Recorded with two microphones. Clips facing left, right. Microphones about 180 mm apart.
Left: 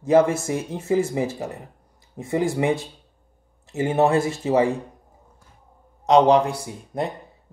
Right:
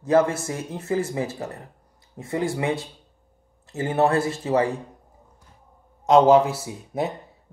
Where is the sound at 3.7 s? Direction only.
15° left (ahead or behind).